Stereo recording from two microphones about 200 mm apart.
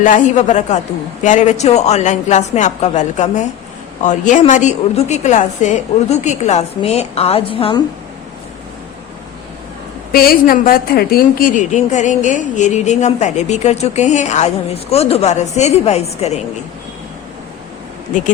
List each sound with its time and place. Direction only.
0.0 s a woman's voice: 40° left (ahead or behind)
10.1 s a woman's voice: 50° left (ahead or behind); by 16.4 s 35° left (ahead or behind)